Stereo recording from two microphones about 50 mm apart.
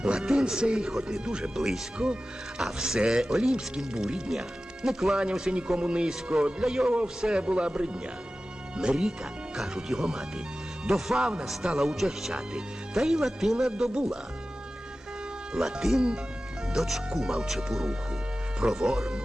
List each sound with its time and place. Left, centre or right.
0.0 s speech: centre
5.1 s speech: centre
6.8 s speech: right; by 13.7 s centre
13.7 s speech: centre
15.5 s speech: centre